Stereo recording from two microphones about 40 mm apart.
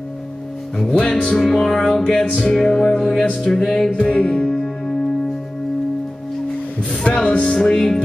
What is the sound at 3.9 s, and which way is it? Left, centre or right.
Music, left.